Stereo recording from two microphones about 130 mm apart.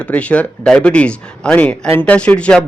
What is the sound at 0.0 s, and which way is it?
A man's voice, 10° left (ahead or behind).